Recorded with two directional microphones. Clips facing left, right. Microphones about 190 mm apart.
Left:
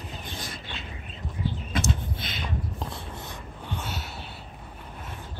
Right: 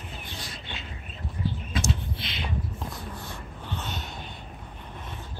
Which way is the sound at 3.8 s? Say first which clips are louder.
Even; 10° left (ahead or behind).